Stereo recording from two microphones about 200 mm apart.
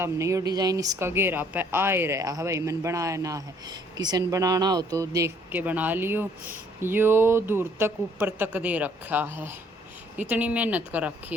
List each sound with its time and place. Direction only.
0.0 s speech: 15° right (ahead or behind)